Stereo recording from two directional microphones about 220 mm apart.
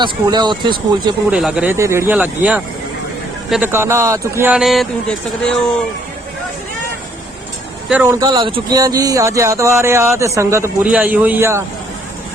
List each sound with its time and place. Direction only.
0.0 s speech: 20° right (ahead or behind)
1.3 s speech: 5° right (ahead or behind)
7.9 s speech: 10° right (ahead or behind)
8.3 s speech: 25° right (ahead or behind)